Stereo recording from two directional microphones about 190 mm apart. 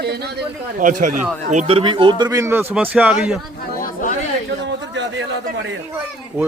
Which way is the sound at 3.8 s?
45° left (ahead or behind).